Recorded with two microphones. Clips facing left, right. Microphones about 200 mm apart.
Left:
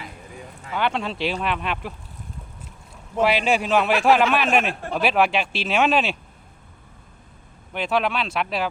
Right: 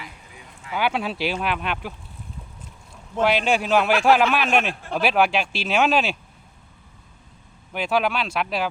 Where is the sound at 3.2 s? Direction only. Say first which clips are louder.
Even; centre (ahead or behind).